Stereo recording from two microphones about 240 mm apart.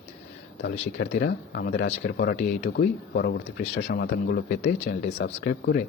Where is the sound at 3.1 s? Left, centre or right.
Left.